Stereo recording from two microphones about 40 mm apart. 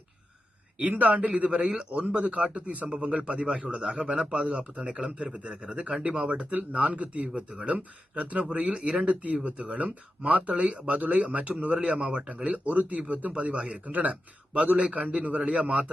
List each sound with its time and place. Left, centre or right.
0.8 s speech: right
1.5 s speech: right
2.9 s a man's voice: right
7.7 s speech: right